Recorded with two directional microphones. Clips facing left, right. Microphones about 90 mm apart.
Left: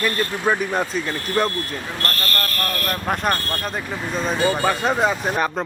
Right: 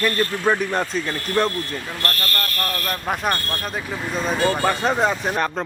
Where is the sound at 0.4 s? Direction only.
10° left (ahead or behind).